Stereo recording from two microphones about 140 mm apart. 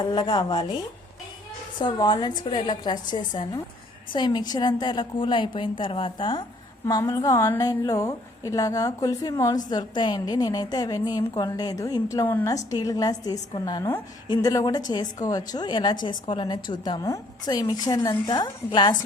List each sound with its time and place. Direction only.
0.0 s a woman's voice: 35° left (ahead or behind)
1.8 s a woman's voice: 30° left (ahead or behind)
12.7 s a woman's voice: 25° left (ahead or behind)